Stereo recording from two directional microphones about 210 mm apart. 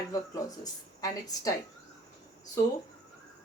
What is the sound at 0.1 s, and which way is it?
Speech, 15° left (ahead or behind).